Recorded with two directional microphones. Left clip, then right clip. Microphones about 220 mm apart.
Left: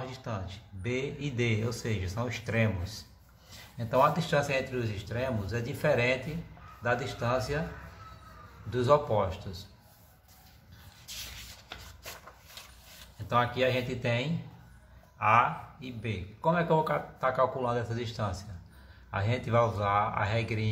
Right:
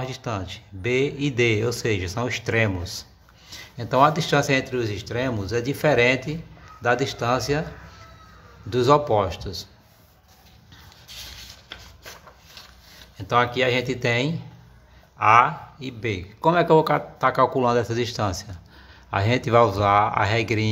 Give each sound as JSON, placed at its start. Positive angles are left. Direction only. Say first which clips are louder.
{"t": 0.0, "sound": "speech", "louder": "right 9 dB", "side_deg": -40}
{"t": 8.6, "sound": "speech", "louder": "right 7 dB", "side_deg": -45}
{"t": 13.3, "sound": "speech", "louder": "right 7 dB", "side_deg": -45}